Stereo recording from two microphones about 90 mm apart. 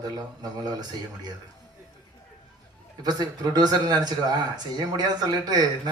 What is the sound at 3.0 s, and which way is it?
Speech, 45° right (ahead or behind).